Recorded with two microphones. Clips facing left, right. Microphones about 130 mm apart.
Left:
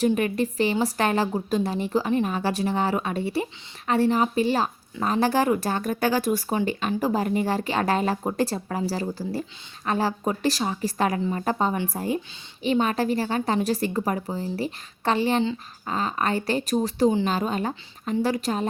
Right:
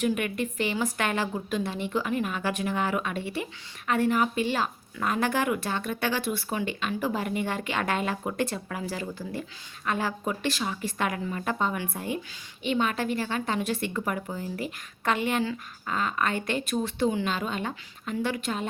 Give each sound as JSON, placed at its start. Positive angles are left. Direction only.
{"t": 0.0, "sound": "a woman's voice", "side_deg": 35}